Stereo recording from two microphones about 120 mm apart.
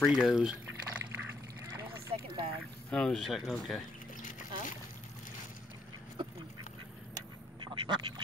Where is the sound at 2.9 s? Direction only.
5° left (ahead or behind).